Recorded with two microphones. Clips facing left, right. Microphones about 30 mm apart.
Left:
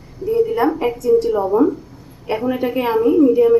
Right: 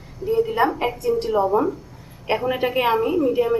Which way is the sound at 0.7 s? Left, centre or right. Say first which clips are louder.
Left 3 dB; right.